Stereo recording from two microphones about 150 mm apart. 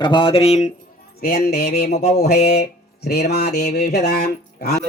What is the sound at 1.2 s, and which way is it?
Speech, 90° left.